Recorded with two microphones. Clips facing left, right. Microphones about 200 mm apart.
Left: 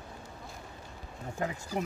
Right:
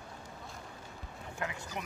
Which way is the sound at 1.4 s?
35° left (ahead or behind).